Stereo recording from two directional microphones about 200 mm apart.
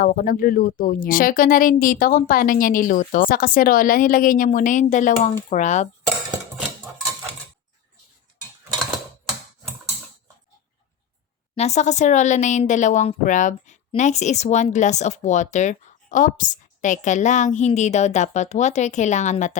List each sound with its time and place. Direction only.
0.0 s speech: 45° left (ahead or behind)
11.5 s speech: 35° left (ahead or behind)